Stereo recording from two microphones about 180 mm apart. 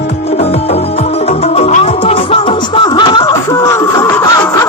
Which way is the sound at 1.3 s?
35° left (ahead or behind).